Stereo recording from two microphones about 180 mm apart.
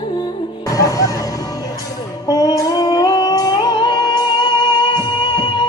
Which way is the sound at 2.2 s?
20° left (ahead or behind).